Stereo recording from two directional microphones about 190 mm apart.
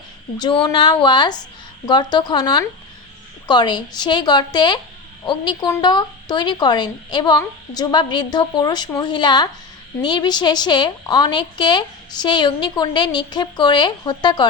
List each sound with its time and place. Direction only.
0.3 s a woman's voice: 25° left (ahead or behind)